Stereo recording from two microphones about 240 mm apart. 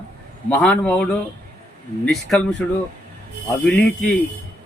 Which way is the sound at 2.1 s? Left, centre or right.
Centre.